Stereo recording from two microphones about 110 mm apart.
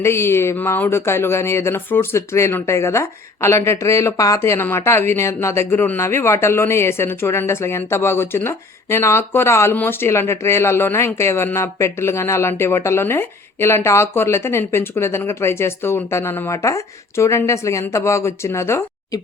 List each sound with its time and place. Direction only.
0.0 s speech: 25° left (ahead or behind)